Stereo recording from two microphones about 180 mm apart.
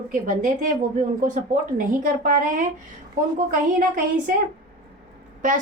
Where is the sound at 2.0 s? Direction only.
45° right (ahead or behind).